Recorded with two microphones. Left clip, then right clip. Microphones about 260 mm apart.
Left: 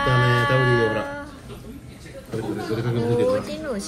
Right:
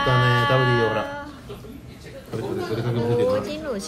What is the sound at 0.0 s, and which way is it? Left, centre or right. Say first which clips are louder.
Music: even; centre.